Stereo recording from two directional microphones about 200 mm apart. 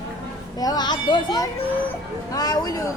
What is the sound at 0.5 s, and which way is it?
Speech, 20° left (ahead or behind).